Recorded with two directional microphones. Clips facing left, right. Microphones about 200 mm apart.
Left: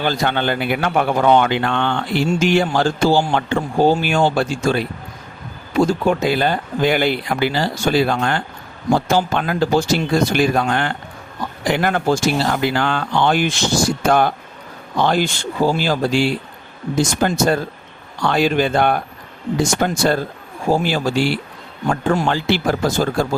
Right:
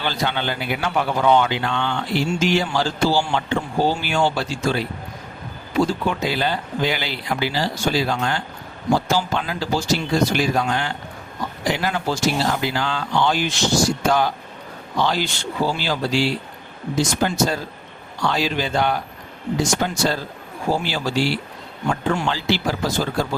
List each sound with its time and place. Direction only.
0.0 s speech: 50° left (ahead or behind)